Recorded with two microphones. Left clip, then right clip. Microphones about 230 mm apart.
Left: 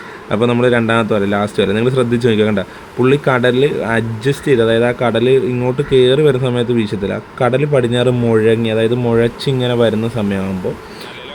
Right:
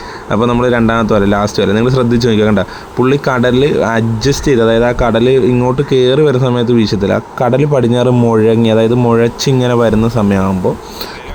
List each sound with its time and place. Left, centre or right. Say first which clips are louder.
0.3 s a man's voice: right 2 dB; centre